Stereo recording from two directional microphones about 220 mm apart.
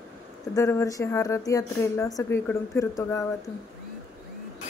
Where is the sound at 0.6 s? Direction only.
15° left (ahead or behind).